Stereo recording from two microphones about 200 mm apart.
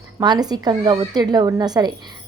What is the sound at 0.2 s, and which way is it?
A woman's voice, 20° right (ahead or behind).